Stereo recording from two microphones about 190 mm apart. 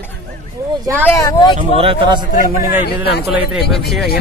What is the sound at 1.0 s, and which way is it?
Speech, 15° left (ahead or behind).